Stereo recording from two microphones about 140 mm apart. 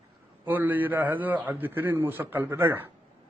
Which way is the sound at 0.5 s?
15° right (ahead or behind).